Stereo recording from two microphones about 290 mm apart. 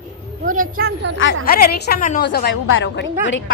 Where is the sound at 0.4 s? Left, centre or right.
Right.